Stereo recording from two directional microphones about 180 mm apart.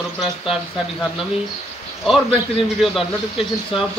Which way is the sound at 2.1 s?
30° left (ahead or behind).